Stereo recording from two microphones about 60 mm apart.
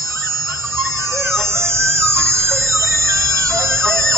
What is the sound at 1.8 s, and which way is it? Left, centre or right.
Music, right.